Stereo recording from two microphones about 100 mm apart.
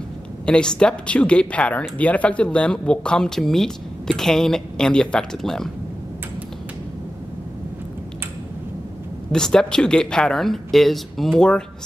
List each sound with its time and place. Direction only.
0.5 s speech: 10° left (ahead or behind)
9.3 s speech: 5° left (ahead or behind)